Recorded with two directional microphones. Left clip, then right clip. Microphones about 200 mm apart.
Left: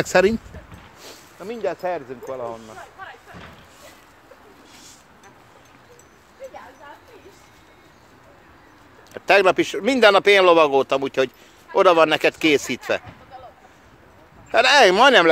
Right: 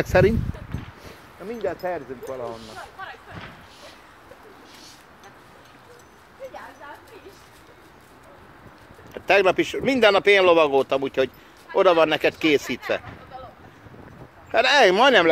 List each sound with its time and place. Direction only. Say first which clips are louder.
0.0 s speech: left 2 dB; 10° left (ahead or behind)
1.4 s speech: left 2 dB; 5° left (ahead or behind)
9.1 s speech: left 3 dB; 15° left (ahead or behind)
14.5 s speech: left 3 dB; 15° left (ahead or behind)